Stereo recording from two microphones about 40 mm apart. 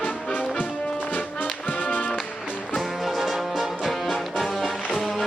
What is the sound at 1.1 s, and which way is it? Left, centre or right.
Music, left.